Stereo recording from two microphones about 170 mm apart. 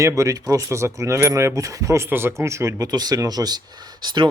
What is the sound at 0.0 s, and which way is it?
Speech, 20° right (ahead or behind).